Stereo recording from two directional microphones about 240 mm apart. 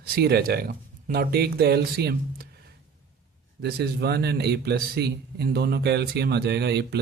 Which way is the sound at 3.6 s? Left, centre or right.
Right.